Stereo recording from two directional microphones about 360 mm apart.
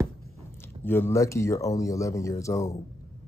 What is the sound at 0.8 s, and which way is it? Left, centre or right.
Speech, centre.